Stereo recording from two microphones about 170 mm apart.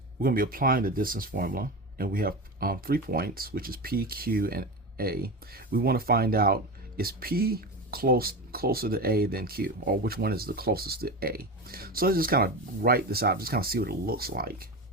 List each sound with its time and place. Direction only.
0.2 s speech: 55° right (ahead or behind)